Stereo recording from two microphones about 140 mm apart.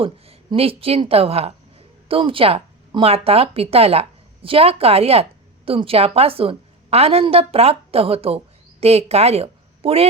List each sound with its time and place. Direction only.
0.0 s a woman's voice: 45° right (ahead or behind)